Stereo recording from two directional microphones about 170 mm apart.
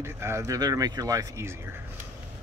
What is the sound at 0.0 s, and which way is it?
Speech, 15° right (ahead or behind).